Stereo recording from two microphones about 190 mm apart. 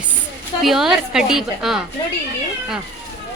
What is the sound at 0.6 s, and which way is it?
A woman's voice, centre (ahead or behind).